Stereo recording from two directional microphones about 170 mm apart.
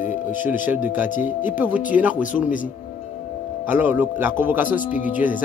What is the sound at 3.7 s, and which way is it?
Speech, 10° right (ahead or behind).